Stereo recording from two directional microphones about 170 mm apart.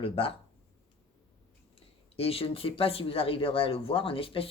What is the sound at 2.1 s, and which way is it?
Speech, 35° left (ahead or behind).